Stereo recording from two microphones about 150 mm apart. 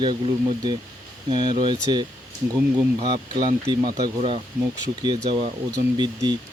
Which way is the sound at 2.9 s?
35° right (ahead or behind).